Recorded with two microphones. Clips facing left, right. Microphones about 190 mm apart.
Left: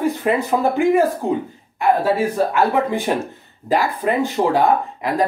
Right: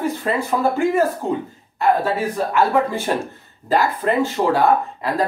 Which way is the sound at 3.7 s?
15° left (ahead or behind).